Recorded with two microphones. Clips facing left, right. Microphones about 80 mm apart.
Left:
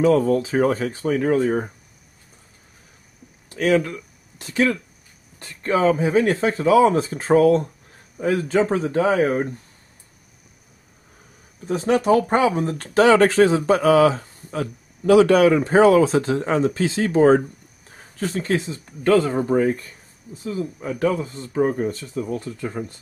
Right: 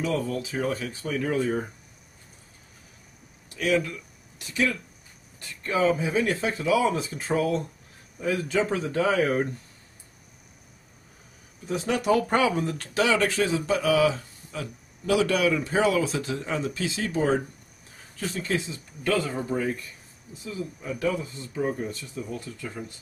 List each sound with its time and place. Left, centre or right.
0.0 s speech: left
3.4 s speech: left
11.6 s speech: left